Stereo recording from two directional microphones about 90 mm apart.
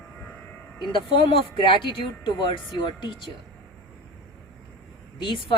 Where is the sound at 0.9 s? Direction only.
80° left.